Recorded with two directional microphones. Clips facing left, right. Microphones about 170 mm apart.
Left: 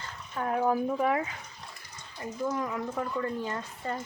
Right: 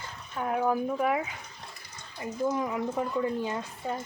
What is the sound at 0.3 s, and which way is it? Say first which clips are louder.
Speech: even; 5° right (ahead or behind).